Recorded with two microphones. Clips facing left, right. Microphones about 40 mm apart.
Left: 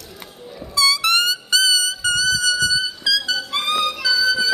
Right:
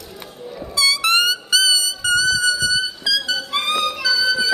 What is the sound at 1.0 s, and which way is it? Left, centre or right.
Music, centre.